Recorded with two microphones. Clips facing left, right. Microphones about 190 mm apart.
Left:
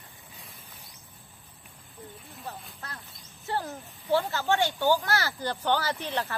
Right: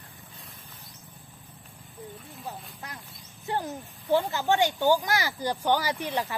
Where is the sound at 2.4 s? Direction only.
15° right (ahead or behind).